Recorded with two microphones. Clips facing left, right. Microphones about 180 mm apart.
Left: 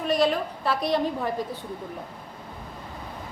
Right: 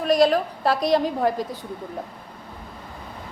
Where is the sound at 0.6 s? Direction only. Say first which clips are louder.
Right 3 dB; 35° right (ahead or behind).